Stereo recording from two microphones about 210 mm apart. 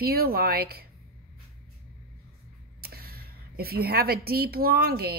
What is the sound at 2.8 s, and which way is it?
A woman's voice, 45° right (ahead or behind).